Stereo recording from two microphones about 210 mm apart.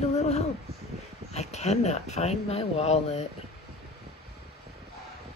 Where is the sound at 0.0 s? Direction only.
30° left (ahead or behind).